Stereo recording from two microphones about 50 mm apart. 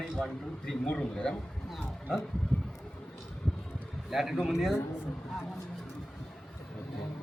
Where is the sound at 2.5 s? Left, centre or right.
Left.